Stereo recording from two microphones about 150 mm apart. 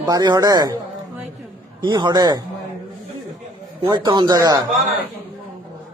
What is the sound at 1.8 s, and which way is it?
Speech, 30° right (ahead or behind).